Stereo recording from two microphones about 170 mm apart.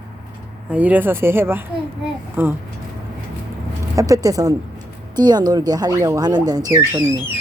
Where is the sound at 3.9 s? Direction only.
20° right (ahead or behind).